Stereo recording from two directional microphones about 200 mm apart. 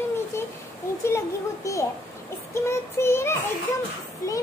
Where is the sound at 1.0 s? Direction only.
15° left (ahead or behind).